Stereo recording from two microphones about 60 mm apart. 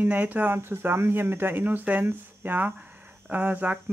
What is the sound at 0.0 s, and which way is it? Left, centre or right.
Speech, right.